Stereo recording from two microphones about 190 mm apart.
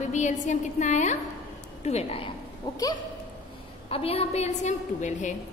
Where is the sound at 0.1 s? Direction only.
40° left (ahead or behind); by 2.8 s 20° left (ahead or behind).